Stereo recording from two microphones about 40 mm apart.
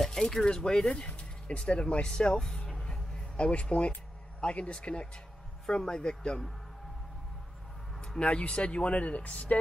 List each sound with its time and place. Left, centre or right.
0.0 s speech: centre
2.7 s music: centre
4.4 s speech: left
8.2 s speech: left